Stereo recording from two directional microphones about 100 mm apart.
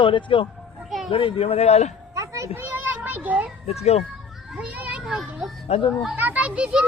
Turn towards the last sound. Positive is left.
turn(degrees=-10)  # may be behind; listen again after turning